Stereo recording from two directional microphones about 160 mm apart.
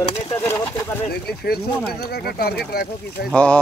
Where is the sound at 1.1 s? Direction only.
75° left (ahead or behind).